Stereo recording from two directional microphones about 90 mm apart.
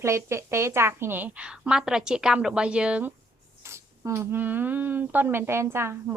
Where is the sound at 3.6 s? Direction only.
30° right (ahead or behind).